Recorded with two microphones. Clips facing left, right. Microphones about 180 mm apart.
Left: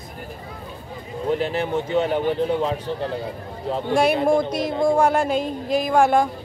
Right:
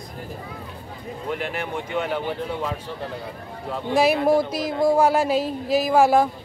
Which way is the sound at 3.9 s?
5° right (ahead or behind).